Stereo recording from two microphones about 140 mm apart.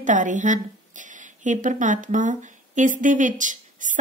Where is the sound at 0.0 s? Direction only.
65° right (ahead or behind).